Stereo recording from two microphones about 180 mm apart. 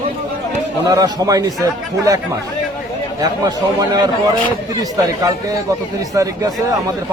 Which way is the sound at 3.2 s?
20° right (ahead or behind).